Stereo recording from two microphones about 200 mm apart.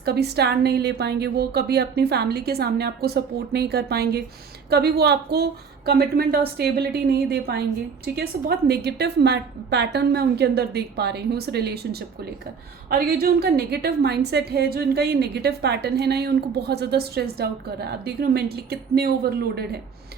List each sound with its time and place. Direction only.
0.0 s a woman's voice: 55° right (ahead or behind)